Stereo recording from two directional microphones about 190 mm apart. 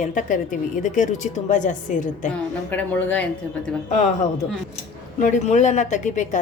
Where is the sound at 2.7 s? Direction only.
10° left (ahead or behind).